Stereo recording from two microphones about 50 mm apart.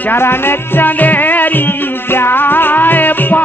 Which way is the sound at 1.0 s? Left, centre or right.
Left.